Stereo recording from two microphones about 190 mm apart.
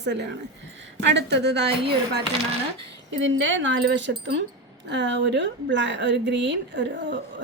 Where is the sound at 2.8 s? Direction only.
75° right (ahead or behind).